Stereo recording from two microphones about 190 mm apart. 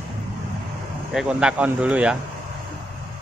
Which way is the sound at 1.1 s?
5° right (ahead or behind).